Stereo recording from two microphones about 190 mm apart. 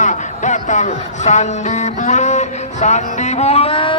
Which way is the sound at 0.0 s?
40° left (ahead or behind).